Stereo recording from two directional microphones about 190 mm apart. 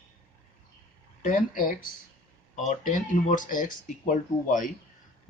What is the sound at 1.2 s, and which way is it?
Speech, 45° left (ahead or behind).